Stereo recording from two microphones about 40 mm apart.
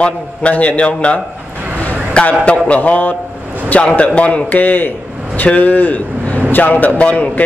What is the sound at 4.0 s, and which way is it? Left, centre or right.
A man's voice, left.